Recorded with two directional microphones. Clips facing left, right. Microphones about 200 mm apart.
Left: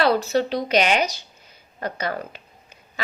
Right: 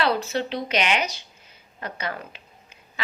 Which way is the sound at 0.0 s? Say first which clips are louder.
Left 4 dB; 40° left (ahead or behind).